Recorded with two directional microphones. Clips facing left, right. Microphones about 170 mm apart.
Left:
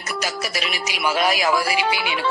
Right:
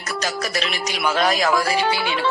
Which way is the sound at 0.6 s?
10° left (ahead or behind).